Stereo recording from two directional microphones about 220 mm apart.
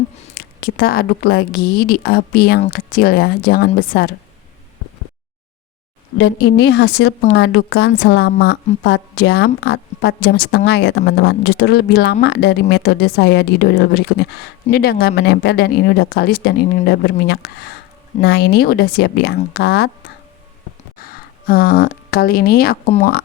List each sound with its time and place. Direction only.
0.3 s a woman's voice: 45° left (ahead or behind)
6.1 s a woman's voice: 50° left (ahead or behind)
21.0 s speech: 40° left (ahead or behind)